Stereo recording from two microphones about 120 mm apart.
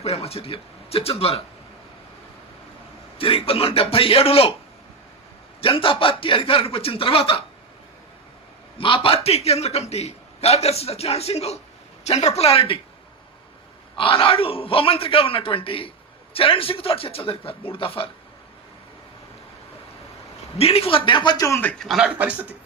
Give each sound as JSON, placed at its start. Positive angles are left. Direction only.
{"t": 0.0, "sound": "a man's voice", "side_deg": 60}
{"t": 3.2, "sound": "a man's voice", "side_deg": 50}
{"t": 5.5, "sound": "a man's voice", "side_deg": 50}
{"t": 8.8, "sound": "a man's voice", "side_deg": 50}
{"t": 13.9, "sound": "a man's voice", "side_deg": 45}
{"t": 20.6, "sound": "a man's voice", "side_deg": 55}
{"t": 21.6, "sound": "a man's voice", "side_deg": 10}
{"t": 21.8, "sound": "speech", "side_deg": -5}